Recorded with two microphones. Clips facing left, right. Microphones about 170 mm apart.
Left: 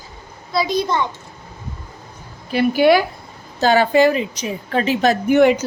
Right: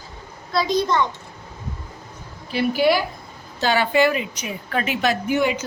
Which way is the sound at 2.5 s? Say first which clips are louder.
Left 5 dB; 55° left (ahead or behind).